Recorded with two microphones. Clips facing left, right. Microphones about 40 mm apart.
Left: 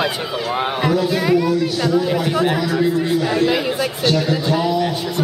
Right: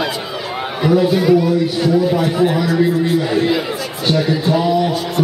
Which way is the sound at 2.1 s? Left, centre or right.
Centre.